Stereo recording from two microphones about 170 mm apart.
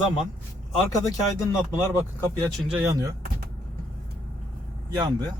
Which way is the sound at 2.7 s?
15° right (ahead or behind).